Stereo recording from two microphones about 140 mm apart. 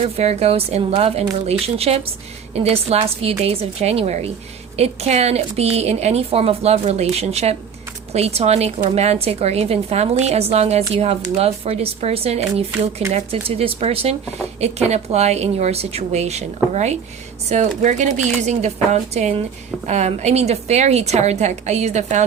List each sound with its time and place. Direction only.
0.2 s a woman's voice: 45° right (ahead or behind)